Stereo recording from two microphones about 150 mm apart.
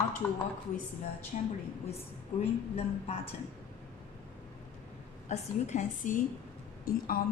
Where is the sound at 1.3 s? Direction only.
55° left (ahead or behind).